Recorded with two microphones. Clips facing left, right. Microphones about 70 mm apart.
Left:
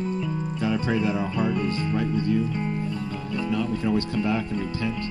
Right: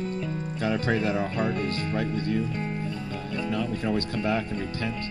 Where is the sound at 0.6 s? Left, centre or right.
Right.